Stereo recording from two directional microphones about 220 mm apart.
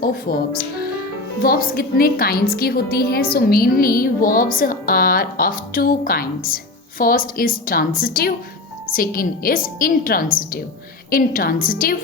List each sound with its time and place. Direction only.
0.3 s a woman's voice: 45° left (ahead or behind)